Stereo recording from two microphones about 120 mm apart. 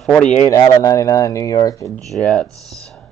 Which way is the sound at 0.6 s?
30° left (ahead or behind).